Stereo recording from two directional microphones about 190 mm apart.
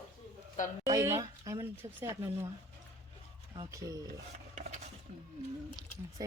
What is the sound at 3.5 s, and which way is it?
Speech, 15° right (ahead or behind).